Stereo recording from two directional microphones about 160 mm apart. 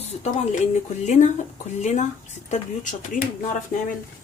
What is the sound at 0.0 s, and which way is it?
Speech, 40° left (ahead or behind).